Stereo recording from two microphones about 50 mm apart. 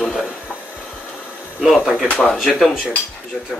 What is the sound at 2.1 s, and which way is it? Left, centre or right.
Speech, left.